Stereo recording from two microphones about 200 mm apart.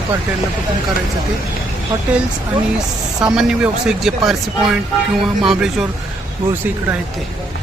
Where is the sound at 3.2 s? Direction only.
5° right (ahead or behind).